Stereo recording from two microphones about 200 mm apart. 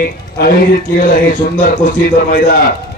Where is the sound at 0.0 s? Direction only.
50° left (ahead or behind).